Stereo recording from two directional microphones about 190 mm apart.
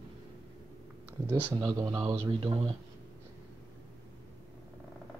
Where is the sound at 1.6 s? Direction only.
20° right (ahead or behind).